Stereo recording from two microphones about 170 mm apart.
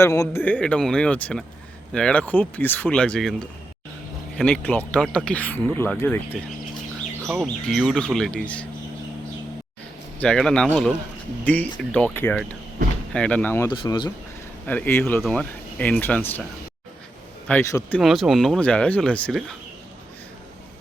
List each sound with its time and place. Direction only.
0.0 s speech: 15° left (ahead or behind)
4.4 s speech: 5° left (ahead or behind)
7.4 s speech: 5° left (ahead or behind)
10.2 s speech: 5° left (ahead or behind)
13.7 s speech: 25° left (ahead or behind)
14.7 s speech: 10° left (ahead or behind)
17.5 s speech: 15° left (ahead or behind)
18.0 s speech: centre (ahead or behind)